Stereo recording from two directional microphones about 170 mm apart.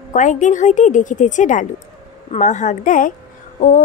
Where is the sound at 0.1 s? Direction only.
45° left (ahead or behind).